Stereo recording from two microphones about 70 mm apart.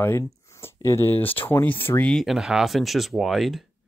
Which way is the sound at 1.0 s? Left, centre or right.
Left.